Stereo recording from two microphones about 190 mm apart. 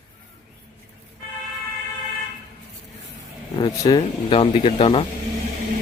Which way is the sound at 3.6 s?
25° left (ahead or behind).